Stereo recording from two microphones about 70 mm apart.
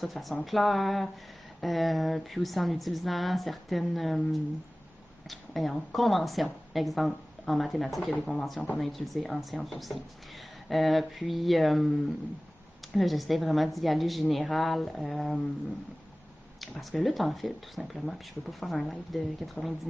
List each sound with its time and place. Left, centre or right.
0.0 s a woman's voice: centre
8.5 s speech: centre
8.8 s a woman's voice: centre
12.9 s a woman's voice: centre
16.9 s a woman's voice: centre